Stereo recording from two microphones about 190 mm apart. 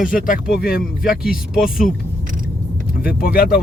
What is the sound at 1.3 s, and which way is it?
Speech, 5° right (ahead or behind).